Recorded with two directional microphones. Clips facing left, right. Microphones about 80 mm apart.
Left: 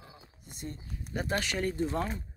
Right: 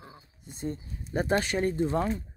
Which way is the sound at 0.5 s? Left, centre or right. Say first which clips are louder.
Right 7 dB; right.